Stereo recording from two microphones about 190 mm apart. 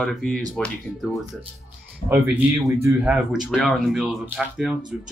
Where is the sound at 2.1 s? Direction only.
10° right (ahead or behind).